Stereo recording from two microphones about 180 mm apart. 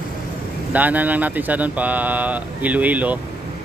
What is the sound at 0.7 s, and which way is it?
Speech, 10° right (ahead or behind).